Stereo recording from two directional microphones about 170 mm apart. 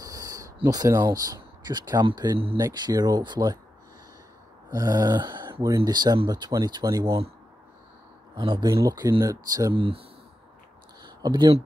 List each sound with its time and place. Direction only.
0.0 s speech: 20° right (ahead or behind)
4.6 s speech: 20° right (ahead or behind)
8.4 s speech: 25° right (ahead or behind)
11.0 s a sound: 25° right (ahead or behind)